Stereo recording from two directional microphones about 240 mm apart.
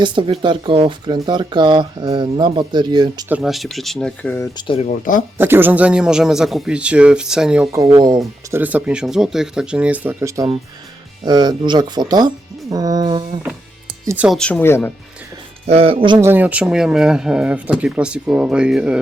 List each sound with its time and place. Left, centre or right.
0.0 s speech: right
3.2 s speech: centre; by 5.2 s left
5.4 s speech: centre
8.4 s speech: centre
13.8 s music: centre
14.3 s speech: centre
15.6 s speech: right; by 18.9 s centre